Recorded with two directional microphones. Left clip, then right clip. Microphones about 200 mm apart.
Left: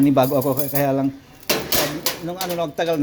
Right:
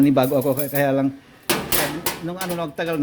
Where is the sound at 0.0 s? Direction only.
30° right (ahead or behind).